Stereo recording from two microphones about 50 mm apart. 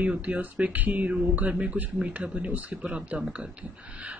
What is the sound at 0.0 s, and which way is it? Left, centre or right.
Speech, right.